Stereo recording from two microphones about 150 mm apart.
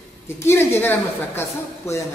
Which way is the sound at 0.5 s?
15° left (ahead or behind).